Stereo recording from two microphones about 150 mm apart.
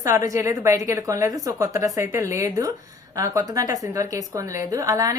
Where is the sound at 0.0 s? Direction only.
20° right (ahead or behind).